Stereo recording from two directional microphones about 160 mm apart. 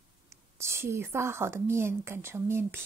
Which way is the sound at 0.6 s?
15° right (ahead or behind).